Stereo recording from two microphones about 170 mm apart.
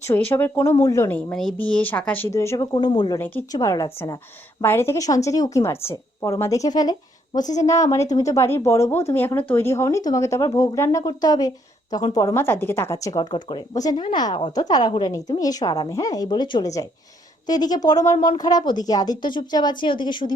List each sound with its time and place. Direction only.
0.3 s speech: 10° left (ahead or behind)
1.3 s speech: 5° left (ahead or behind); by 3.2 s 25° left (ahead or behind)
3.2 s speech: 10° left (ahead or behind); by 20.3 s 30° left (ahead or behind)